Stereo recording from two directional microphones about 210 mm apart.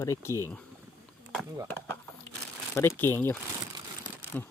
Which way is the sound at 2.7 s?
10° left (ahead or behind).